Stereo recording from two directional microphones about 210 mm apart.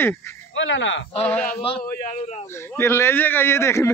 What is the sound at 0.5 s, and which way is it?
Speech, 65° left (ahead or behind).